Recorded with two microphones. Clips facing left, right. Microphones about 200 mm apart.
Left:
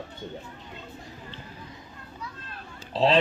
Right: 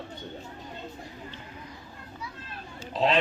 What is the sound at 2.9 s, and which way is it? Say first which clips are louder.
Speech: left 3 dB; 30° left (ahead or behind).